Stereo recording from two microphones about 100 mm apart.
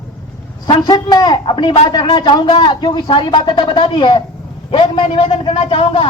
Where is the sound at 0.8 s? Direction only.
45° left (ahead or behind).